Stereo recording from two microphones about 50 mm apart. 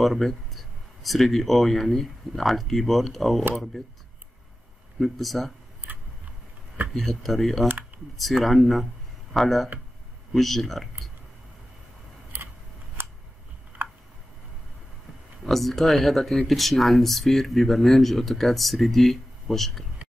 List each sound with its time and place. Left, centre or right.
0.0 s speech: centre
5.0 s speech: centre
6.9 s speech: centre
13.0 s scissors: right
13.8 s a sound: right
15.4 s speech: centre